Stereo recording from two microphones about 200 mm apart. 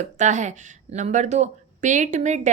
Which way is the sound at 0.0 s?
35° right (ahead or behind).